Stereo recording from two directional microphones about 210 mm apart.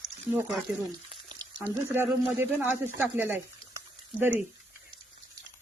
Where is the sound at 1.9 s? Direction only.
10° right (ahead or behind).